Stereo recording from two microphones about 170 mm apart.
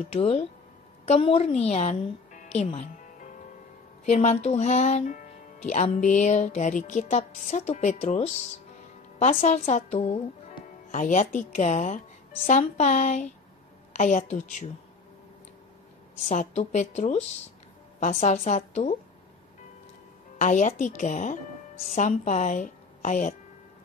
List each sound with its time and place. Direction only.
0.1 s a woman's voice: 35° left (ahead or behind)
5.7 s music: 45° left (ahead or behind)
9.9 s speech: 40° left (ahead or behind)
10.9 s music: 45° left (ahead or behind)
16.3 s music: 45° left (ahead or behind)
20.3 s music: 45° left (ahead or behind)
21.9 s a woman's voice: 45° left (ahead or behind)